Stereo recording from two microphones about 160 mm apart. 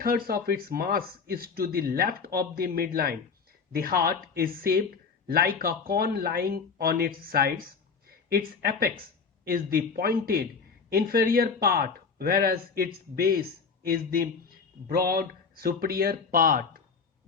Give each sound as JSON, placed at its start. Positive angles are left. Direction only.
{"t": 0.3, "sound": "speech", "side_deg": -70}